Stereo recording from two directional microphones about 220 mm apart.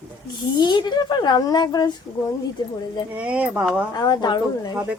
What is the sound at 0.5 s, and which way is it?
Speech, 20° left (ahead or behind).